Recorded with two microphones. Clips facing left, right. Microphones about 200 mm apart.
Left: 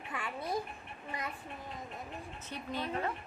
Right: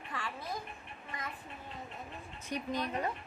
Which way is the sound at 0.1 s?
20° left (ahead or behind).